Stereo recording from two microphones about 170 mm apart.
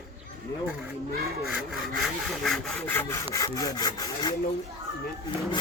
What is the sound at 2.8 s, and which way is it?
Sawing, 15° left (ahead or behind).